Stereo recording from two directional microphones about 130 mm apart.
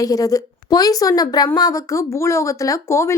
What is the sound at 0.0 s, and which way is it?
A woman's voice, 25° left (ahead or behind).